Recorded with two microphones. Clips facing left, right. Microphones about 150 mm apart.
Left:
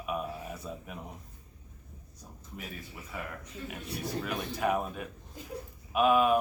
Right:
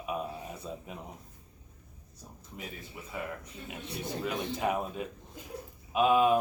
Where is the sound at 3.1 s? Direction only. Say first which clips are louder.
Right 2 dB; 20° right (ahead or behind).